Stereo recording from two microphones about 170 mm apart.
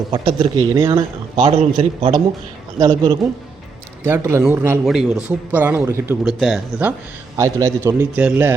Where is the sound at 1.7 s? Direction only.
30° right (ahead or behind).